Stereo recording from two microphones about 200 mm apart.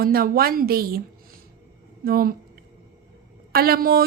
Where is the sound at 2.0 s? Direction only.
50° right (ahead or behind).